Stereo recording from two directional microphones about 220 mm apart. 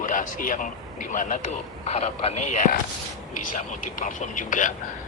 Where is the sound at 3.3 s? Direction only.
90° left.